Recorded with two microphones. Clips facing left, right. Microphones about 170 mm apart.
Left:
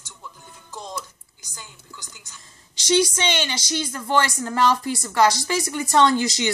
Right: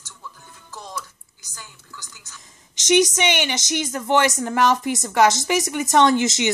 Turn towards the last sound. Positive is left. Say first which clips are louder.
# right 2 dB
turn(degrees=-20)  # may be behind; listen again after turning